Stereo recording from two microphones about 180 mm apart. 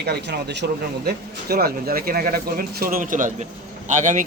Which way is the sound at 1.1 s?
60° right (ahead or behind).